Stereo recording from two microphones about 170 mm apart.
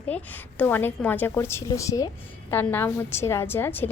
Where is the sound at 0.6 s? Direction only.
10° left (ahead or behind).